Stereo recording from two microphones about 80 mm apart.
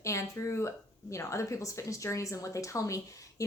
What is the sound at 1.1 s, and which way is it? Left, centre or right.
Speech, left.